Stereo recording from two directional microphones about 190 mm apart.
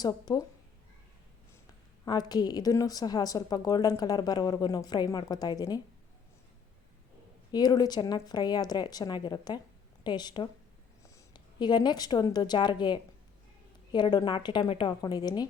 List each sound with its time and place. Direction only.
0.0 s a woman's voice: 20° left (ahead or behind)
2.0 s a woman's voice: 20° left (ahead or behind)
7.5 s a woman's voice: 20° left (ahead or behind)